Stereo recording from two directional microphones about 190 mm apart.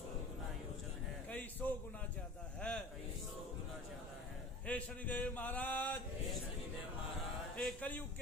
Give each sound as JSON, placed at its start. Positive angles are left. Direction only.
{"t": 1.3, "sound": "a sound", "side_deg": 10}
{"t": 4.6, "sound": "speech", "side_deg": 10}
{"t": 7.5, "sound": "speech", "side_deg": 5}